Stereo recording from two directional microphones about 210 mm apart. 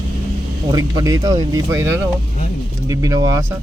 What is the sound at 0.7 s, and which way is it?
Speech, 15° right (ahead or behind).